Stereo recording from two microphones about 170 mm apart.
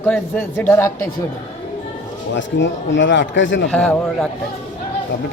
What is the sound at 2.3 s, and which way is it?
Speech, 90° left.